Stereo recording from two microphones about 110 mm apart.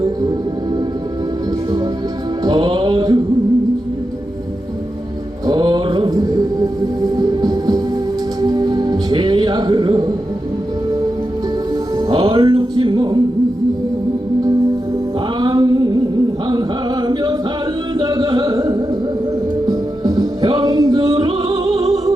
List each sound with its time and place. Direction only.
2.4 s music: 40° right (ahead or behind)
5.5 s mantra: 45° right (ahead or behind)
7.0 s music: 35° right (ahead or behind)
11.9 s music: 40° right (ahead or behind)
15.4 s music: 40° right (ahead or behind)
16.5 s a sound: 40° right (ahead or behind)
18.0 s carnatic music: 40° right (ahead or behind)
19.6 s music: 35° right (ahead or behind)